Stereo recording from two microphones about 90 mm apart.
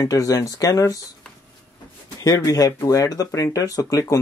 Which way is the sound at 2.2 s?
40° left (ahead or behind).